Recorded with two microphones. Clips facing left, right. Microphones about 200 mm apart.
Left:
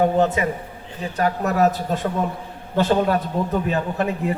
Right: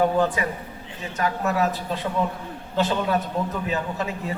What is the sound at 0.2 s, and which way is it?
Speech, 25° left (ahead or behind).